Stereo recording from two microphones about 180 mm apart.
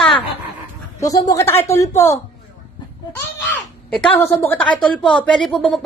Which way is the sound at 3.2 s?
5° left (ahead or behind).